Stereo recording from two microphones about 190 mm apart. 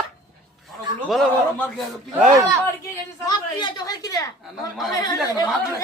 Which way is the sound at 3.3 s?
25° left (ahead or behind).